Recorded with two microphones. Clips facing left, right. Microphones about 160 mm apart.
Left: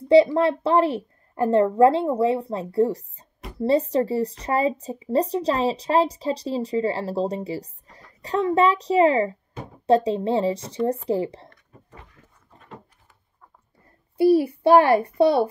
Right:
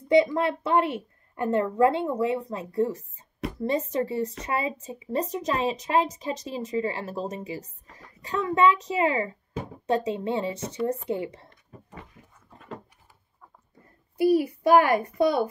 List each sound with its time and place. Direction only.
0.1 s a child's voice: 35° left (ahead or behind)
14.1 s speech: 30° left (ahead or behind)